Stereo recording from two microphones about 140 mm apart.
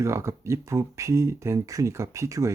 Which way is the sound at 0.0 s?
20° right (ahead or behind).